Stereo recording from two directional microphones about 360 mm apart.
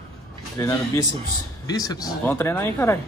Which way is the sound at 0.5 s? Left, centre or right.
Centre.